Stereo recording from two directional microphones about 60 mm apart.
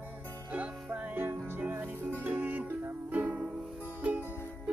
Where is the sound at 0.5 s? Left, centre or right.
Right.